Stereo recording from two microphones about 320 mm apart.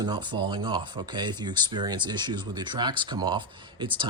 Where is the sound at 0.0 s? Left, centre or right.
Centre.